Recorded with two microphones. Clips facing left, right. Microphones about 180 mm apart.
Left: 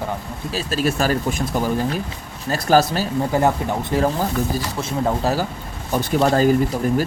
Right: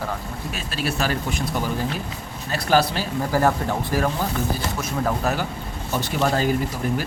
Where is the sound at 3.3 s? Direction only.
20° left (ahead or behind).